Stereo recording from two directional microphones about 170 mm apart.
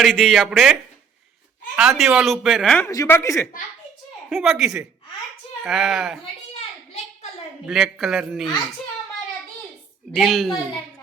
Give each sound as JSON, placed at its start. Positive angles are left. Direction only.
{"t": 0.0, "sound": "speech", "side_deg": 0}
{"t": 2.8, "sound": "speech", "side_deg": 15}
{"t": 4.3, "sound": "speech", "side_deg": 0}
{"t": 7.7, "sound": "speech", "side_deg": 0}
{"t": 10.1, "sound": "speech", "side_deg": 0}